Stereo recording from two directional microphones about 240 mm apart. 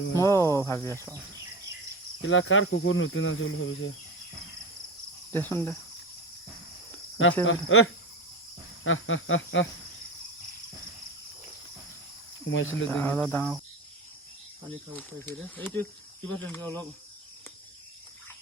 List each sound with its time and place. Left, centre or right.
0.2 s cricket: centre
2.2 s speech: left
5.3 s cricket: centre
7.4 s cricket: left
8.8 s speech: left
12.5 s speech: left
12.9 s cricket: centre
15.4 s cricket: centre